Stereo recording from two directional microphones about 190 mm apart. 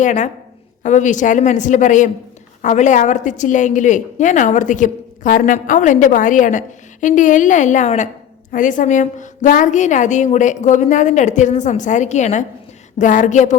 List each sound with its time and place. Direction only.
0.0 s a woman's voice: 40° left (ahead or behind)